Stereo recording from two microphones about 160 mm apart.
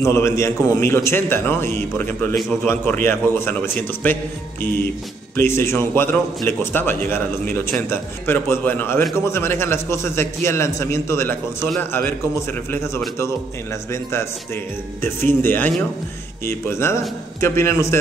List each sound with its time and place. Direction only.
0.0 s a man's voice: 15° left (ahead or behind)
12.7 s a man's voice: 15° left (ahead or behind)